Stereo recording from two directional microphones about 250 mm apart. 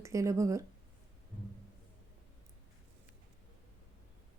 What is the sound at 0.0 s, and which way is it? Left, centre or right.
Speech, centre.